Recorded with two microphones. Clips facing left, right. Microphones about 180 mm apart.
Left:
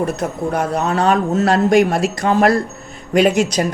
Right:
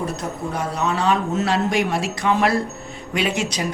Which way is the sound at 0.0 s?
55° left (ahead or behind).